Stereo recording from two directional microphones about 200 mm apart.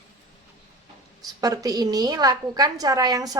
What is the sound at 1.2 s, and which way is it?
A woman's voice, 20° right (ahead or behind).